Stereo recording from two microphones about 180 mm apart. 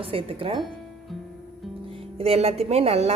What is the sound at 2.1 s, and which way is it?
Speech, 35° right (ahead or behind).